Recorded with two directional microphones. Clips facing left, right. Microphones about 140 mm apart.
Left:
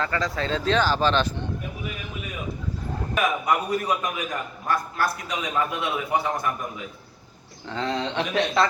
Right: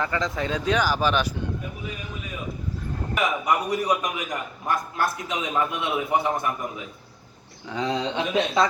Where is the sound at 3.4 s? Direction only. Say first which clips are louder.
Right 1 dB; 15° right (ahead or behind).